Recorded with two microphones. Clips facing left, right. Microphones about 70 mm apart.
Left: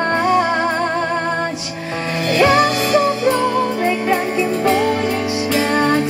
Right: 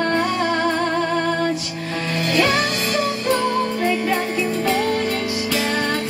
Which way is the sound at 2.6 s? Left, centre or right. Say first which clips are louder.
Left 7 dB; centre.